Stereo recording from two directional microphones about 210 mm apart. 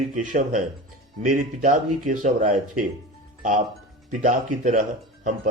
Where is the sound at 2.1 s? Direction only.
35° right (ahead or behind).